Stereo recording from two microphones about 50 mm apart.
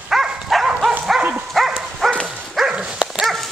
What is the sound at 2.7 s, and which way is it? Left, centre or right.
Dog, centre.